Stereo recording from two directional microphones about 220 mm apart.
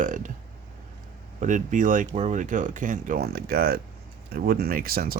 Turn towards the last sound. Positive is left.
turn(degrees=-40)  # may be behind; listen again after turning